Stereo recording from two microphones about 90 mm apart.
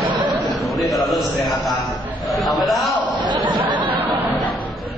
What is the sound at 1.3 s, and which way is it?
Speech, 55° left (ahead or behind).